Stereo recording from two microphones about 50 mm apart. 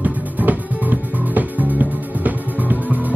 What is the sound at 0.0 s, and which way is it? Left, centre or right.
Music, right.